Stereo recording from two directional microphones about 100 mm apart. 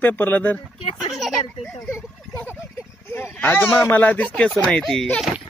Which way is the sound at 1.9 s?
20° left (ahead or behind).